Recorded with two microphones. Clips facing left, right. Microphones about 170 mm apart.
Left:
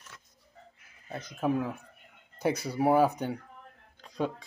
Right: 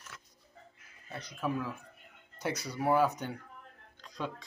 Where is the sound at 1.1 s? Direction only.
50° left (ahead or behind).